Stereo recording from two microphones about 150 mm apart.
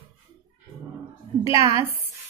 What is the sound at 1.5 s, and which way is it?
Speech, 20° right (ahead or behind).